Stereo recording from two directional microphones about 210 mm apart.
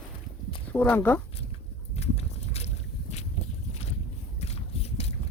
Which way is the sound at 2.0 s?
30° left (ahead or behind).